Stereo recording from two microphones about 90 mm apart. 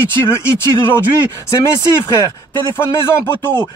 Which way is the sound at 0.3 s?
25° left (ahead or behind).